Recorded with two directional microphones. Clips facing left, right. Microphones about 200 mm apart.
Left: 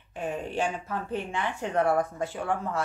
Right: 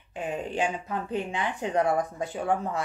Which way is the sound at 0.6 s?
15° right (ahead or behind).